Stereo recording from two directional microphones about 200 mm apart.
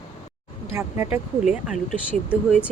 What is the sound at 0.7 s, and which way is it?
Speech, 10° right (ahead or behind).